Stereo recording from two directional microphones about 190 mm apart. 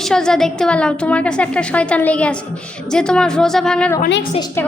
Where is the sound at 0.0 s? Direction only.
5° left (ahead or behind).